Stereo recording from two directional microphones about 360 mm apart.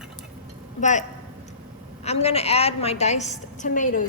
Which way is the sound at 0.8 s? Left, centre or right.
Centre.